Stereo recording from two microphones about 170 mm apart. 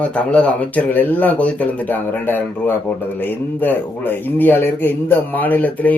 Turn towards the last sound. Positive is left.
turn(degrees=10)  # may be behind; listen again after turning